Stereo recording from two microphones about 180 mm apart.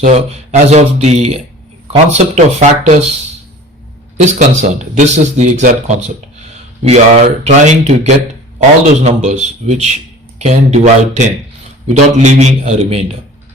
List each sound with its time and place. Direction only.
0.0 s a man's voice: 35° right (ahead or behind)
4.2 s a man's voice: 40° right (ahead or behind)
7.4 s a man's voice: 40° right (ahead or behind)